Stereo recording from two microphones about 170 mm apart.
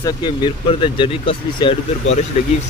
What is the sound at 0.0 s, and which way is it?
Speech, 25° left (ahead or behind).